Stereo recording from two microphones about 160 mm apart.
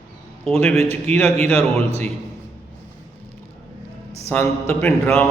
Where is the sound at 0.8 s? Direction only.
40° right (ahead or behind).